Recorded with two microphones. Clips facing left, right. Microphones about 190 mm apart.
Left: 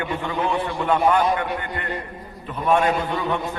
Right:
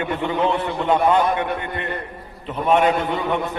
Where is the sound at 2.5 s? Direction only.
20° right (ahead or behind).